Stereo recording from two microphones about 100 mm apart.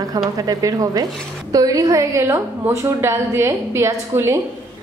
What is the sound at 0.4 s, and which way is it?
A woman's voice, 35° right (ahead or behind).